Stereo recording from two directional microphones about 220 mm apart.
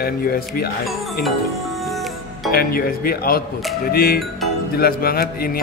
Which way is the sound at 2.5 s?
45° left (ahead or behind).